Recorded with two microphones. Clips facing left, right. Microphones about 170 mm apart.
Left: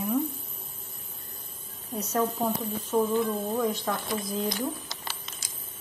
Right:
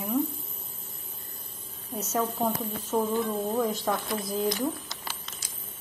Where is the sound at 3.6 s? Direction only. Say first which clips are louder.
Right 1 dB; 5° right (ahead or behind).